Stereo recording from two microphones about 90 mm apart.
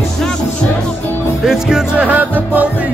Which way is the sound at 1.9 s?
15° right (ahead or behind).